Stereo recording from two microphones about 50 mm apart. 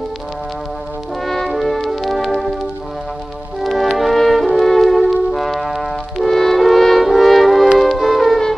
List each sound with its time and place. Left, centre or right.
1.2 s music: centre
3.6 s music: centre
4.0 s brass instrument: centre
7.8 s music: centre